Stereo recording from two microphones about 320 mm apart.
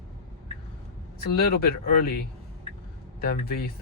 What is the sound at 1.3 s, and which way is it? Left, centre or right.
Speech, left.